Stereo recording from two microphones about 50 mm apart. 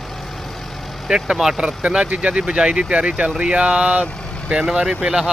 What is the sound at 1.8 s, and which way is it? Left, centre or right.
Speech, right.